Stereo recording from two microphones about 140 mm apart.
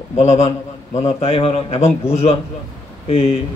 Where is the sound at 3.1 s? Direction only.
45° left (ahead or behind).